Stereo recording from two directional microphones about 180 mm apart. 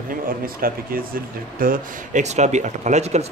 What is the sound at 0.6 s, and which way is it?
Speech, 55° right (ahead or behind).